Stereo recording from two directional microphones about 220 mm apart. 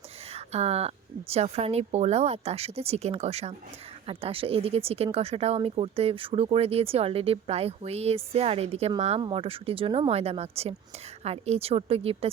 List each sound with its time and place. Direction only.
0.3 s speech: 30° right (ahead or behind)